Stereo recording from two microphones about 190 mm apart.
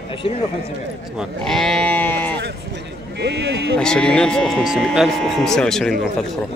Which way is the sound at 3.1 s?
65° right (ahead or behind).